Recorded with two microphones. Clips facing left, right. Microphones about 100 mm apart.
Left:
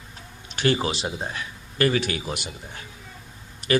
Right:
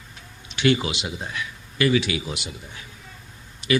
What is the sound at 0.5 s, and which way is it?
A man's voice, 40° left (ahead or behind).